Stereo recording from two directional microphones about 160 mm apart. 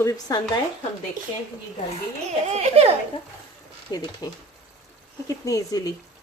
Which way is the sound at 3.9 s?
25° left (ahead or behind).